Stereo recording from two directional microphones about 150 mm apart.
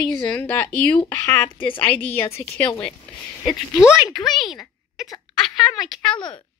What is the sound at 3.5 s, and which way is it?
A woman's voice, 5° right (ahead or behind).